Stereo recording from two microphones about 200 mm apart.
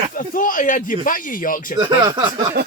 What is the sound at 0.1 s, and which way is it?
Speech, 45° left (ahead or behind).